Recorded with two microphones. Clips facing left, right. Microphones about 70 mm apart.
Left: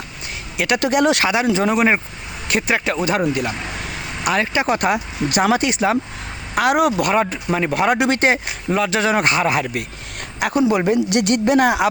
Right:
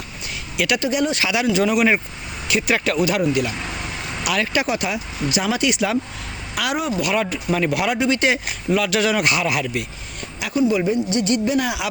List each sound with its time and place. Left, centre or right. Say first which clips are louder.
0.5 s speech: left 2 dB; left
0.8 s speech: left 5 dB; left
1.2 s speech: left 2 dB; left
2.6 s speech: right 1 dB; left
3.0 s speech: even; left
6.7 s speech: left 6 dB; left
7.1 s speech: left 3 dB; left
7.9 s speech: left 2 dB; left
8.2 s speech: left 2 dB; left
10.4 s speech: left 2 dB; left